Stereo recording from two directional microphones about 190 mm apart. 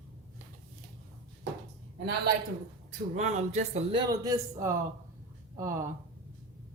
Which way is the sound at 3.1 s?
35° right (ahead or behind).